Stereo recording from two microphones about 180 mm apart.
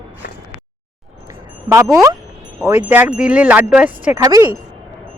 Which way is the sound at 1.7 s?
15° right (ahead or behind).